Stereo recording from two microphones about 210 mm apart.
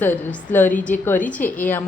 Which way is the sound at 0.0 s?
10° left (ahead or behind).